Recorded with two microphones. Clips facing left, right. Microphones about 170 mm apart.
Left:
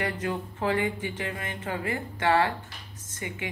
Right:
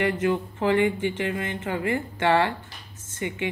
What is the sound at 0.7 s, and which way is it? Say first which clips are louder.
Speech: right 6 dB; 25° right (ahead or behind).